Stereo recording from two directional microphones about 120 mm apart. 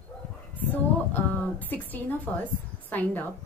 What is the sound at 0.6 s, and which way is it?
A woman's voice, 15° left (ahead or behind).